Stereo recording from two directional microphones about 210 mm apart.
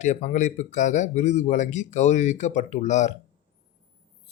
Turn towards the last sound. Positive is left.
turn(degrees=35)  # may be behind; listen again after turning